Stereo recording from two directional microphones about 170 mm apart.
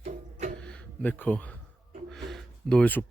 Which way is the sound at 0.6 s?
5° left (ahead or behind).